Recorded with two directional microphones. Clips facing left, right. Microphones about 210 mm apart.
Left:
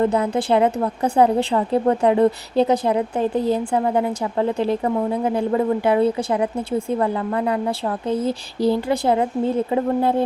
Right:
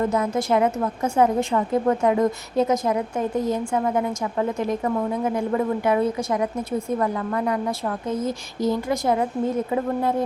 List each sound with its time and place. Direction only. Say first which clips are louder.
0.0 s a woman's voice: left 3 dB; 30° left (ahead or behind)